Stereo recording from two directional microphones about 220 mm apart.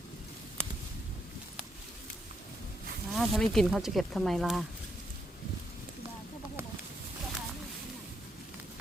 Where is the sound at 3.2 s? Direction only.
Centre (ahead or behind).